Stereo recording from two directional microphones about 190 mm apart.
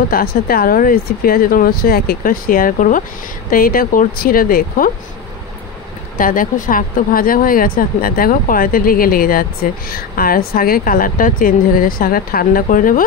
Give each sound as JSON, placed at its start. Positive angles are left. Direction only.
{"t": 0.1, "sound": "speech", "side_deg": 50}
{"t": 6.1, "sound": "speech", "side_deg": 45}